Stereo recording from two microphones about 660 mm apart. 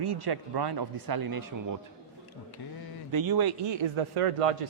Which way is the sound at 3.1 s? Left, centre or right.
Right.